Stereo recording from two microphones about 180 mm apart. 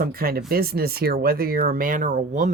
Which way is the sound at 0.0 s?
55° right (ahead or behind).